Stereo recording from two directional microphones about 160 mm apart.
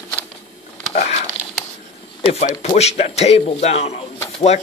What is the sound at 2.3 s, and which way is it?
Speech, 40° left (ahead or behind).